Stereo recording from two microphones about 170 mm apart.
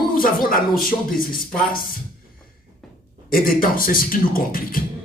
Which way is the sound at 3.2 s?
55° left (ahead or behind).